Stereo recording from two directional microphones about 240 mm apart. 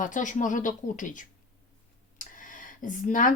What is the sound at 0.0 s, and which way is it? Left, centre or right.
Speech, left.